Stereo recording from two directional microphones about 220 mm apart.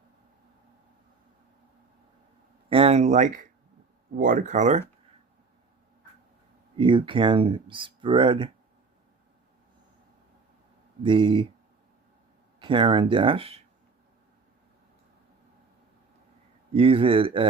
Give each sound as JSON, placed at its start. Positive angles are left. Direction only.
{"t": 2.6, "sound": "speech", "side_deg": -25}
{"t": 6.7, "sound": "speech", "side_deg": -20}
{"t": 11.0, "sound": "speech", "side_deg": -20}
{"t": 12.5, "sound": "speech", "side_deg": -20}
{"t": 16.7, "sound": "speech", "side_deg": -25}